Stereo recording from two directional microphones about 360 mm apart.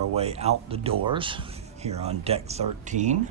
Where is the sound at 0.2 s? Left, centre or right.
Centre.